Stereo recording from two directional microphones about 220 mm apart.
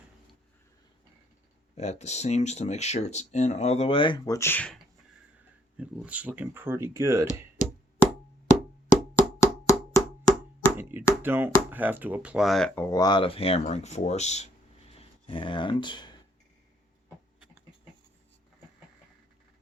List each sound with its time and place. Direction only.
1.7 s speech: 30° left (ahead or behind); by 4.8 s 5° left (ahead or behind)
5.7 s speech: 5° right (ahead or behind)
9.1 s wood block: 15° left (ahead or behind)
10.8 s chop: 10° right (ahead or behind)
11.2 s speech: 10° right (ahead or behind); by 16.1 s 20° left (ahead or behind)